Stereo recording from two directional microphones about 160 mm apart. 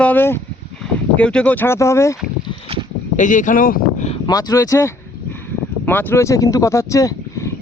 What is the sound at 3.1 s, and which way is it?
Speech, 55° left (ahead or behind).